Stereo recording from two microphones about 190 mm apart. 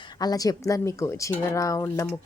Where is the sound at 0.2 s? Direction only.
20° left (ahead or behind).